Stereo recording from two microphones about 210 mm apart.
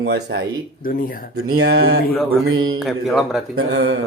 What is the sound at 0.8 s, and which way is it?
Speech, 40° left (ahead or behind).